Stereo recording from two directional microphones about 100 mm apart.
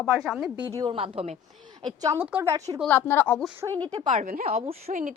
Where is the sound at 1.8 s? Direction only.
40° right (ahead or behind).